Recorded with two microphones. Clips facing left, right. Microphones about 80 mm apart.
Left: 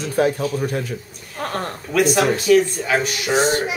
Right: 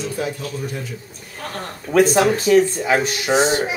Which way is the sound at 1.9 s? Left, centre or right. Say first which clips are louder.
Right 2 dB; right.